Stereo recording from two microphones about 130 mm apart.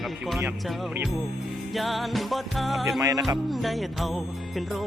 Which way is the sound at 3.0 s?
25° right (ahead or behind).